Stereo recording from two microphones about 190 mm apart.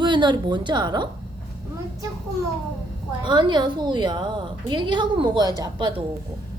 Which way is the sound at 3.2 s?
25° right (ahead or behind).